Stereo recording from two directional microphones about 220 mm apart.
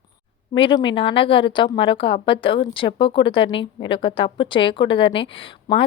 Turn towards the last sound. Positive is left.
turn(degrees=25)  # may be behind; listen again after turning